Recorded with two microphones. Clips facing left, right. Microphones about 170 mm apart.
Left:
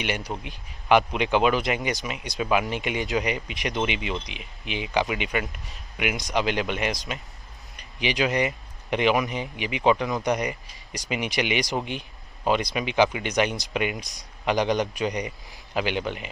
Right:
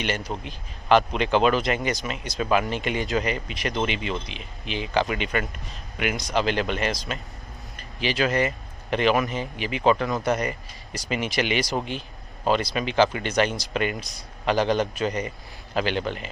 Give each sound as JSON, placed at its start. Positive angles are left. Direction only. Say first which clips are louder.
{"t": 0.0, "sound": "speech", "louder": "right 1 dB", "side_deg": 15}